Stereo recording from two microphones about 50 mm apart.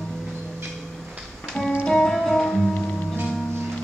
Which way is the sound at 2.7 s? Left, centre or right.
Left.